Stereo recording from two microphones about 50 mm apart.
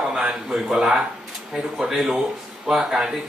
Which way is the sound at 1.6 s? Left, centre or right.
Centre.